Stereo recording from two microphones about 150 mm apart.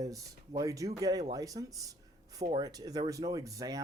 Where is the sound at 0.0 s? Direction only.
25° right (ahead or behind).